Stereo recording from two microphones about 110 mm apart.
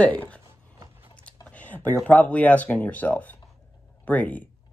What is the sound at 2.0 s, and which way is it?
Speech, 10° left (ahead or behind).